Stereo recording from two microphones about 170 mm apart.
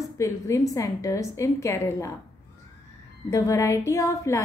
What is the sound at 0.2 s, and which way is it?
A woman's voice, 20° left (ahead or behind).